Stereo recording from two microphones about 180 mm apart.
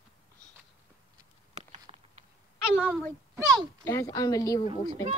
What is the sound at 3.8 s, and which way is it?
Speech, 15° left (ahead or behind).